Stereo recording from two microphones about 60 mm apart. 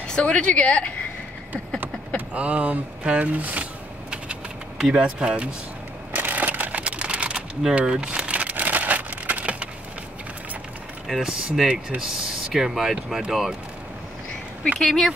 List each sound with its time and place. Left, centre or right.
0.0 s a woman's voice: centre
1.8 s speech: right
4.1 s vehicle: centre
6.1 s a sound: right
11.1 s speech: centre
14.8 s speech: centre